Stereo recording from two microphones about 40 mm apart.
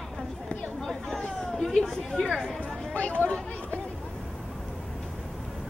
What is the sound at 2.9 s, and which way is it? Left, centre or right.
Chatter, left.